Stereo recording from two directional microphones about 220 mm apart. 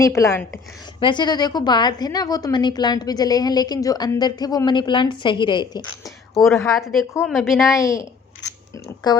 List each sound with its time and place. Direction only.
0.0 s a woman's voice: 15° left (ahead or behind)
6.7 s a woman's voice: centre (ahead or behind)
7.8 s speech: 15° left (ahead or behind)
9.0 s a woman's voice: 20° left (ahead or behind)